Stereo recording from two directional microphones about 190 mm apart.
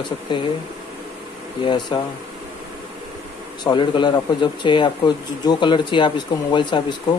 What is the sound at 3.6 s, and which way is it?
Speech, 25° left (ahead or behind).